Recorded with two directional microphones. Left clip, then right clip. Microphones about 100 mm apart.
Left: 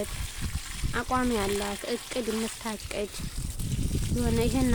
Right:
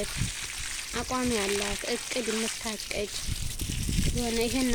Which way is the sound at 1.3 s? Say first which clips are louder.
Even; 20° right (ahead or behind).